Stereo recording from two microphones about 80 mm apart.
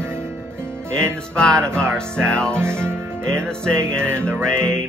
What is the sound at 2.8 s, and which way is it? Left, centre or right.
Music, right.